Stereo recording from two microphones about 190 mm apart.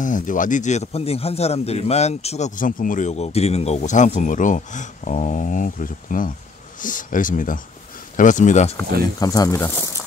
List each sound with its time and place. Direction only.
0.0 s speech: 45° left (ahead or behind)
9.2 s speech: 20° left (ahead or behind)